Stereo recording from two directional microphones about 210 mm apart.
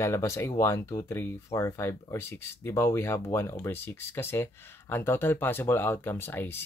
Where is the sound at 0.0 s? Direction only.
15° left (ahead or behind).